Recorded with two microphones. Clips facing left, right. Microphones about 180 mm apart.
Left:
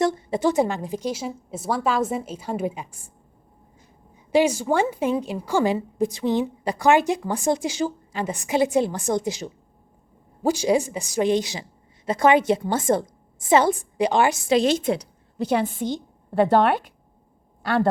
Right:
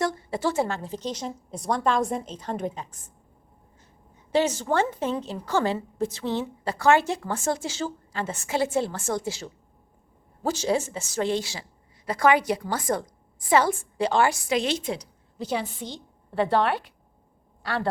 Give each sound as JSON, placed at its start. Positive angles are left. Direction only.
{"t": 0.0, "sound": "a woman's voice", "side_deg": 20}
{"t": 4.1, "sound": "a woman's voice", "side_deg": 10}
{"t": 14.6, "sound": "a woman's voice", "side_deg": 50}